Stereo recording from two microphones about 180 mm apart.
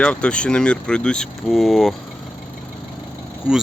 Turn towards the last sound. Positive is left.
turn(degrees=-5)  # may be behind; listen again after turning